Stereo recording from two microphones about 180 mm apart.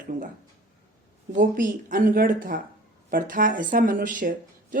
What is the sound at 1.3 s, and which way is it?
Speech, 50° right (ahead or behind).